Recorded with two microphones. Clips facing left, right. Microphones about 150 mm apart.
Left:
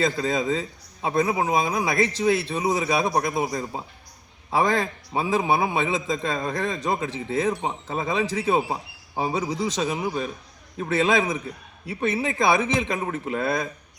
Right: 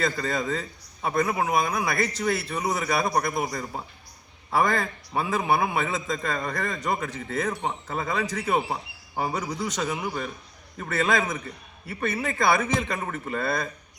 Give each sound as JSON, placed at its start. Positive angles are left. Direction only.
{"t": 0.0, "sound": "a man's voice", "side_deg": 15}
{"t": 5.1, "sound": "a man's voice", "side_deg": 10}
{"t": 5.7, "sound": "a man's voice", "side_deg": 15}